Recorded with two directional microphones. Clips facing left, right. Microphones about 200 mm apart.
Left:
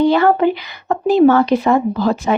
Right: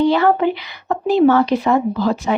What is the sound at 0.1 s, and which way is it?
Speech, 50° left (ahead or behind).